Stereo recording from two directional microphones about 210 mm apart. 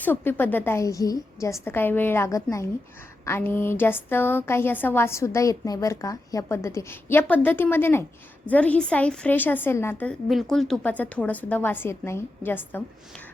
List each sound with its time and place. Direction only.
0.0 s a woman's voice: 10° left (ahead or behind)